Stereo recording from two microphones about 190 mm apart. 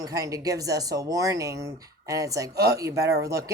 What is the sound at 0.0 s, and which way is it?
Speech, 20° right (ahead or behind).